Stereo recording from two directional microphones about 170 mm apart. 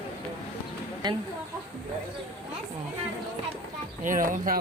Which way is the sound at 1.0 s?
25° right (ahead or behind).